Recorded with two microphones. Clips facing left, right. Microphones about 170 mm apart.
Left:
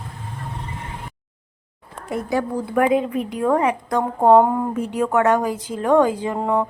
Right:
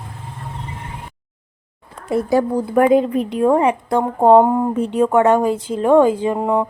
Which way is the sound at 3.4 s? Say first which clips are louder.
Right 4 dB; 25° right (ahead or behind).